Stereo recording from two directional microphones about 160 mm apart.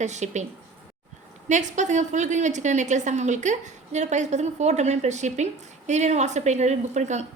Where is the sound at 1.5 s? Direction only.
50° right (ahead or behind).